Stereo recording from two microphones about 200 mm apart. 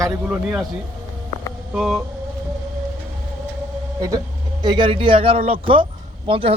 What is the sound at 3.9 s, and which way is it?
Speech, 20° right (ahead or behind).